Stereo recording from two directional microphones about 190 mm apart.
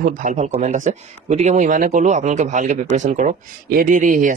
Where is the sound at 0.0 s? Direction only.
45° right (ahead or behind).